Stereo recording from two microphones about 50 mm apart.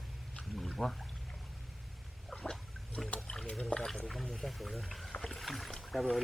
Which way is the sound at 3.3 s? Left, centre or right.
Centre.